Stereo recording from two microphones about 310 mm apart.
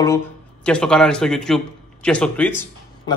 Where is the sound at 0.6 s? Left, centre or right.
Centre.